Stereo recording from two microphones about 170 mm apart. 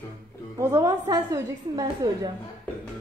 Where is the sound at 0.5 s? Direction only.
20° right (ahead or behind).